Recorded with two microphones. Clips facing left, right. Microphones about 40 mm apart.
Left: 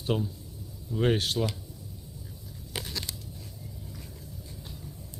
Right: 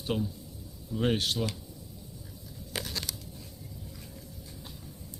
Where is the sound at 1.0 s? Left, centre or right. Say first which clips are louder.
Left 2 dB; left.